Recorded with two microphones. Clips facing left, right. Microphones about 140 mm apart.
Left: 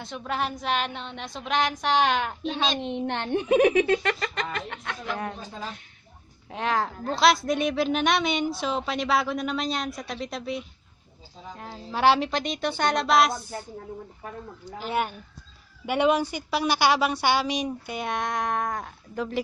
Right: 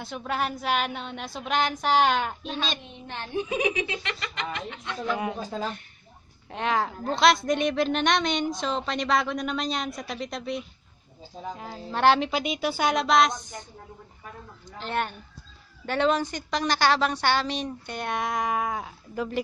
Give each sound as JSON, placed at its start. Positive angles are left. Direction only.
{"t": 0.0, "sound": "a woman's voice", "side_deg": -5}
{"t": 2.8, "sound": "a child's voice", "side_deg": 70}
{"t": 5.1, "sound": "speech", "side_deg": -10}
{"t": 6.5, "sound": "a woman's voice", "side_deg": 0}
{"t": 14.6, "sound": "a woman's voice", "side_deg": 10}